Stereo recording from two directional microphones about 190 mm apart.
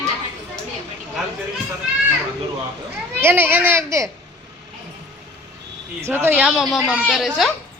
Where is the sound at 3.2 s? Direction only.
10° right (ahead or behind).